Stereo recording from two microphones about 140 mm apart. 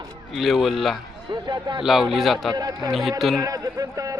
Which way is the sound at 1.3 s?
30° right (ahead or behind).